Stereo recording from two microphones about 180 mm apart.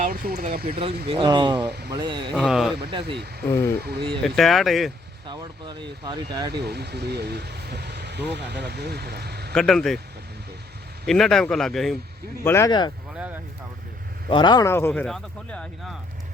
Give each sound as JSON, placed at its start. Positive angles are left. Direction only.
{"t": 0.0, "sound": "speech", "side_deg": -55}
{"t": 1.0, "sound": "speech", "side_deg": -30}
{"t": 2.3, "sound": "a man's voice", "side_deg": 0}
{"t": 3.5, "sound": "speech", "side_deg": 15}
{"t": 3.8, "sound": "speech", "side_deg": -65}
{"t": 4.2, "sound": "a man's voice", "side_deg": 0}
{"t": 5.2, "sound": "speech", "side_deg": -25}
{"t": 6.5, "sound": "speech", "side_deg": -65}
{"t": 9.6, "sound": "a man's voice", "side_deg": 5}
{"t": 11.0, "sound": "a man's voice", "side_deg": 0}
{"t": 12.4, "sound": "speech", "side_deg": 15}
{"t": 13.1, "sound": "speech", "side_deg": -10}
{"t": 14.3, "sound": "speech", "side_deg": 25}